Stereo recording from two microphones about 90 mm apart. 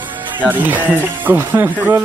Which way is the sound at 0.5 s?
20° right (ahead or behind).